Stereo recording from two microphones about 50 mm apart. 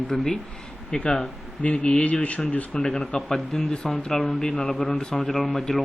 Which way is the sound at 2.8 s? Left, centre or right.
Centre.